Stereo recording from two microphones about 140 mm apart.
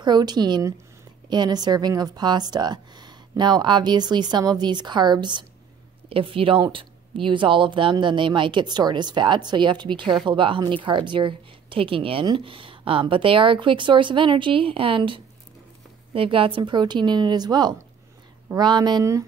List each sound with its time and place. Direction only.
0.0 s a woman's voice: 30° right (ahead or behind)